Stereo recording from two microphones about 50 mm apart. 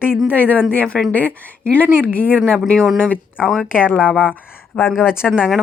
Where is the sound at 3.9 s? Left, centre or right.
Left.